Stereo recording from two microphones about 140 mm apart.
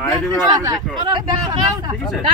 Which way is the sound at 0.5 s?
30° right (ahead or behind).